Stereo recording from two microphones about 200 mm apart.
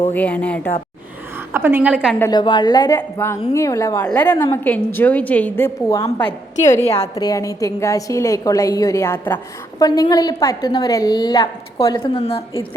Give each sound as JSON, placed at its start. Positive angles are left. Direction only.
{"t": 0.1, "sound": "a woman's voice", "side_deg": 10}
{"t": 1.5, "sound": "a woman's voice", "side_deg": -10}
{"t": 2.1, "sound": "a woman's voice", "side_deg": 15}